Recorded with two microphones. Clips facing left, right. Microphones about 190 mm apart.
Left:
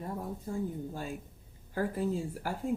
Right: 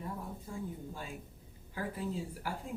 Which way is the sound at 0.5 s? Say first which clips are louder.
Left 8 dB; 40° left (ahead or behind).